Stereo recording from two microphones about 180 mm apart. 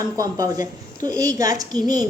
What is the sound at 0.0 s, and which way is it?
A woman's voice, 20° right (ahead or behind).